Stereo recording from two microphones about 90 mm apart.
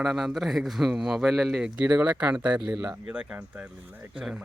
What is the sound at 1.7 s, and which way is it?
Speech, 15° right (ahead or behind).